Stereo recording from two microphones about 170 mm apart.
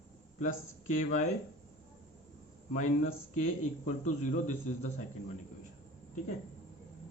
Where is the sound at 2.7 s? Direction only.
45° left (ahead or behind).